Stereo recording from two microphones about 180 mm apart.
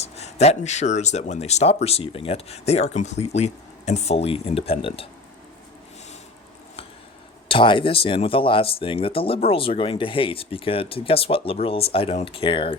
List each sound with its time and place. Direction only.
0.0 s speech: 35° left (ahead or behind)
7.4 s speech: 30° left (ahead or behind)